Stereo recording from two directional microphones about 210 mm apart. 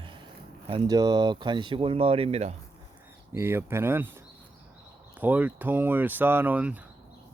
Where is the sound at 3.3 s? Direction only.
10° right (ahead or behind).